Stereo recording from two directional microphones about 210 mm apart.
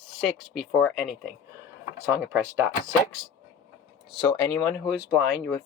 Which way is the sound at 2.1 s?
10° right (ahead or behind).